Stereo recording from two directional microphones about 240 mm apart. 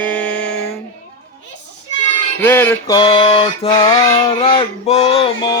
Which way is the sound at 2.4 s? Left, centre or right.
Centre.